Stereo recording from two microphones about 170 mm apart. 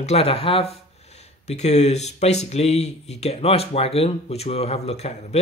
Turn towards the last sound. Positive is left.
turn(degrees=40)  # may be behind; listen again after turning